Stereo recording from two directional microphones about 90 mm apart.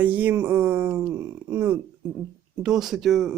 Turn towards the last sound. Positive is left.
turn(degrees=0)  # may be behind; listen again after turning